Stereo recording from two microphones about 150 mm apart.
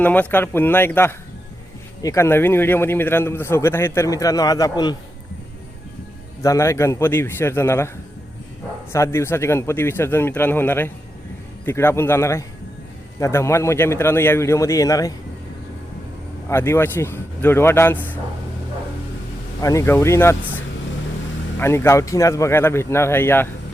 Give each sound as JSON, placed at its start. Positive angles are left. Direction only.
{"t": 0.0, "sound": "a man's voice", "side_deg": 10}
{"t": 6.4, "sound": "a man's voice", "side_deg": 20}
{"t": 8.9, "sound": "a man's voice", "side_deg": 20}
{"t": 16.5, "sound": "a man's voice", "side_deg": 15}
{"t": 19.6, "sound": "a man's voice", "side_deg": 20}
{"t": 21.6, "sound": "a man's voice", "side_deg": 15}